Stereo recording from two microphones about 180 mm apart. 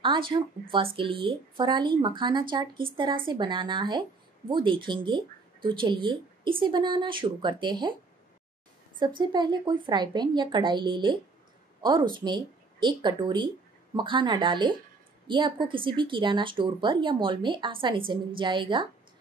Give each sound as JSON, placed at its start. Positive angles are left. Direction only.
{"t": 0.3, "sound": "speech", "side_deg": -30}
{"t": 9.0, "sound": "speech", "side_deg": -25}